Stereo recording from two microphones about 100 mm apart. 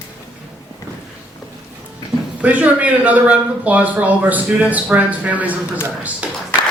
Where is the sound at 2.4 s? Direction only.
15° right (ahead or behind).